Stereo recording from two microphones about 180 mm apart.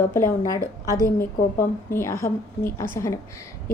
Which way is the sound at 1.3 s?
50° left (ahead or behind).